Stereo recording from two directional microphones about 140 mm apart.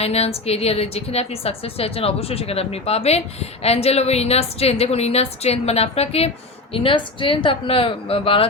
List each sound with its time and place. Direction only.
0.0 s a woman's voice: 45° left (ahead or behind)